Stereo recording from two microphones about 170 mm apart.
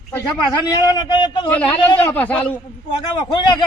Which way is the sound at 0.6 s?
25° left (ahead or behind).